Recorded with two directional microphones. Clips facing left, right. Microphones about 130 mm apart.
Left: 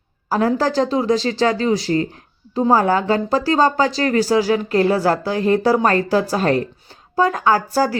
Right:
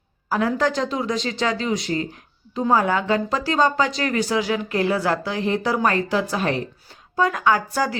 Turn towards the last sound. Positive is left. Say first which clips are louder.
# left 4 dB
turn(degrees=35)  # may be behind; listen again after turning